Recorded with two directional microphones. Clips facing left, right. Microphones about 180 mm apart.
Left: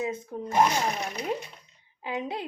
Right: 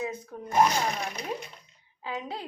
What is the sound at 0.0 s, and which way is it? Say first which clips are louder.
Speech: left 3 dB; 25° left (ahead or behind).